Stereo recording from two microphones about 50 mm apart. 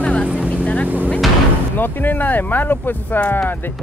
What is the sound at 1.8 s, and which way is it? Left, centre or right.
Speech, left.